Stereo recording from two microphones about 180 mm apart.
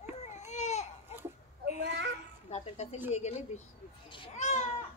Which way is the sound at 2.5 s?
40° left (ahead or behind).